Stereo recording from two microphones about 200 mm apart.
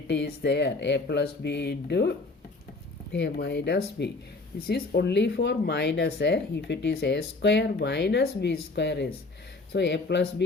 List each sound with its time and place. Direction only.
0.1 s speech: 60° left (ahead or behind)